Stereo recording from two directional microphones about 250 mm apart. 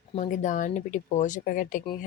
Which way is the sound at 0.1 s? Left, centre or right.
Left.